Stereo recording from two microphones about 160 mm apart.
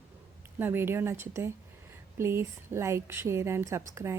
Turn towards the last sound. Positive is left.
turn(degrees=-15)  # may be behind; listen again after turning